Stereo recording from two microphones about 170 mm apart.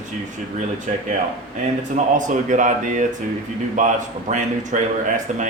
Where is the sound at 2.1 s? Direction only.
45° right (ahead or behind).